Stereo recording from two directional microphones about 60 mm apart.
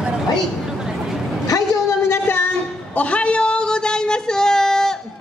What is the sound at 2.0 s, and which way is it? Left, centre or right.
Music, left.